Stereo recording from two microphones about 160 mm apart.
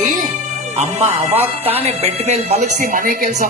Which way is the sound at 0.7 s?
40° right (ahead or behind).